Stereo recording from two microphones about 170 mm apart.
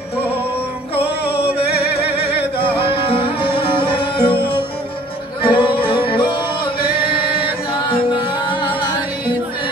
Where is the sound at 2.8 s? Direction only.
30° left (ahead or behind).